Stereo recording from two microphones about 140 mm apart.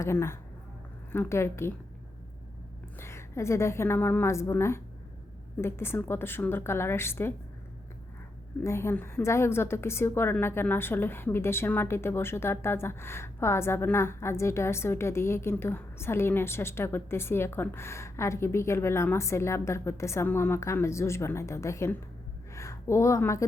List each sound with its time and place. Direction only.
0.0 s speech: 20° left (ahead or behind)
3.0 s a woman's voice: 20° left (ahead or behind)
8.6 s a woman's voice: 20° left (ahead or behind)